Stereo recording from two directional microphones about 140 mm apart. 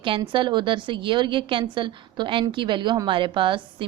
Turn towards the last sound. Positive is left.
turn(degrees=-35)  # may be behind; listen again after turning